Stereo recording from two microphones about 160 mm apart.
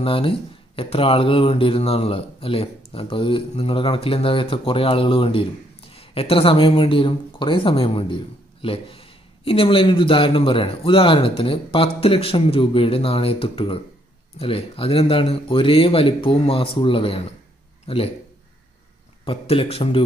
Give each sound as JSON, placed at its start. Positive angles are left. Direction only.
{"t": 0.0, "sound": "a man's voice", "side_deg": 35}
{"t": 19.2, "sound": "speech", "side_deg": 35}